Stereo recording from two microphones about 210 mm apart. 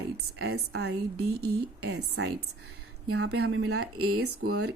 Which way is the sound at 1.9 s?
90° right.